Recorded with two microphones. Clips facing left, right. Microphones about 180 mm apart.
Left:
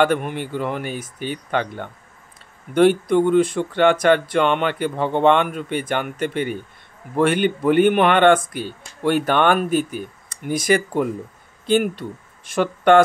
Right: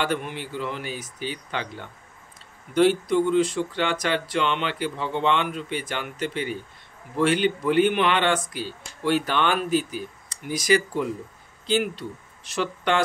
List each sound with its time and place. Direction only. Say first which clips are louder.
0.0 s speech: left 8 dB; 55° left (ahead or behind)